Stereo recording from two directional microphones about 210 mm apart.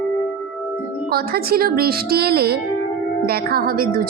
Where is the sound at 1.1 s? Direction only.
45° right (ahead or behind).